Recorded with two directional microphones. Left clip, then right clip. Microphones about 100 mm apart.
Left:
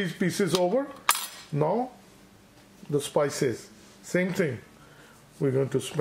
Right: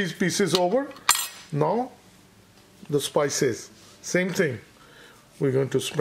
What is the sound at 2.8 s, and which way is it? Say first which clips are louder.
Speech: right 2 dB; 30° right (ahead or behind).